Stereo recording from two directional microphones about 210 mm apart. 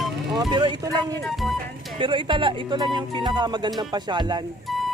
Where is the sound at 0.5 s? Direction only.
20° right (ahead or behind).